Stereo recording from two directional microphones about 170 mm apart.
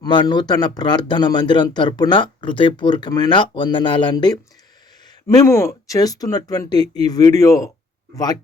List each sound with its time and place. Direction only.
0.0 s speech: 25° left (ahead or behind)